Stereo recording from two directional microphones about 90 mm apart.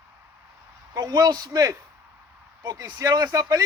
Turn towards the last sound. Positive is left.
turn(degrees=-40)  # may be behind; listen again after turning